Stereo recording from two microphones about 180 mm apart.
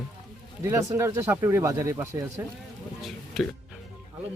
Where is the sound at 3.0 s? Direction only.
Centre (ahead or behind).